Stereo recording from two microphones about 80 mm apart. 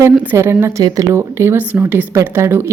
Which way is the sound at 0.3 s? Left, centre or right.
Right.